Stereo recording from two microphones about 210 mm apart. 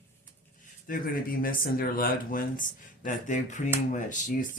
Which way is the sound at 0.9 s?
45° left (ahead or behind).